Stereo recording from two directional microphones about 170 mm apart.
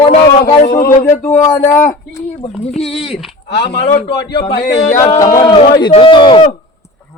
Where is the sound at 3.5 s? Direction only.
70° left (ahead or behind).